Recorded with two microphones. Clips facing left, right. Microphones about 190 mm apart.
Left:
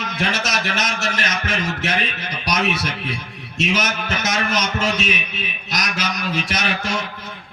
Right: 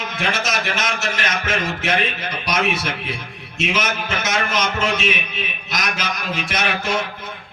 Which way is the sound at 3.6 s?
45° left (ahead or behind).